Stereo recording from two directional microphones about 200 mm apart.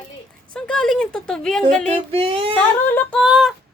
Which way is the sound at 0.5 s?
5° left (ahead or behind).